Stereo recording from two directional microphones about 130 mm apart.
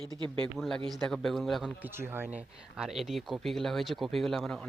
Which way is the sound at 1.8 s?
15° right (ahead or behind).